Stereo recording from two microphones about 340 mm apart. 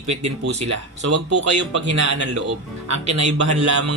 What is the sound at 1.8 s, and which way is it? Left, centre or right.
Speech, left.